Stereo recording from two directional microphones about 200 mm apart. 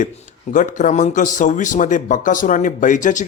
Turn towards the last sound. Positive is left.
turn(degrees=40)  # may be behind; listen again after turning